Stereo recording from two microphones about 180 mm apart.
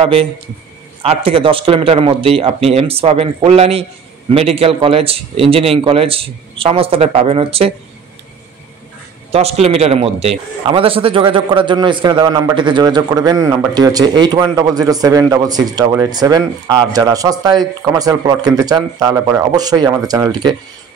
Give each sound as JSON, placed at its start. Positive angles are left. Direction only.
{"t": 0.0, "sound": "a man's voice", "side_deg": -30}
{"t": 9.3, "sound": "a man's voice", "side_deg": -35}